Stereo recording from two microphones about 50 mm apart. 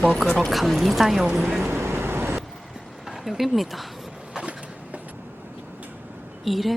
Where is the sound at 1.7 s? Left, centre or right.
Right.